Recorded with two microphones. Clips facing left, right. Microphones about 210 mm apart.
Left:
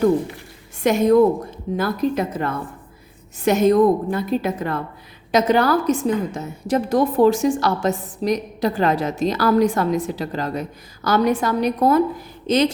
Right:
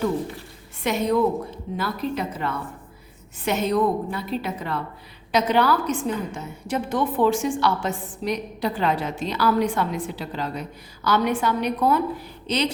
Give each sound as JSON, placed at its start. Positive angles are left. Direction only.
{"t": 0.8, "sound": "a woman's voice", "side_deg": 45}